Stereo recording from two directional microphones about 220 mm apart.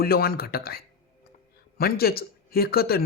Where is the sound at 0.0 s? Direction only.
45° left (ahead or behind).